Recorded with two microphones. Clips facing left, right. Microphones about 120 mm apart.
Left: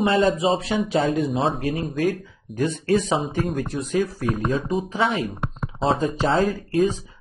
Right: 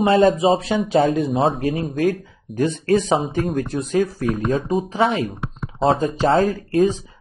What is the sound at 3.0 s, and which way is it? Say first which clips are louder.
A man's voice: right 3 dB; 35° right (ahead or behind).